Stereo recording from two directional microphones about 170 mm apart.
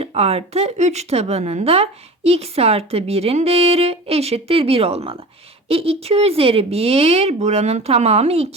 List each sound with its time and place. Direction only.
0.0 s speech: 35° right (ahead or behind)